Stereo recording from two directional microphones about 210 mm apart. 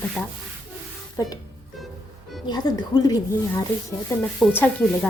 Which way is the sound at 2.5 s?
20° left (ahead or behind).